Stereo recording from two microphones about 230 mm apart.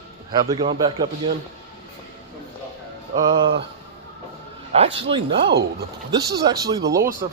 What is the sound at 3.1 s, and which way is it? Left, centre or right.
Speech, centre.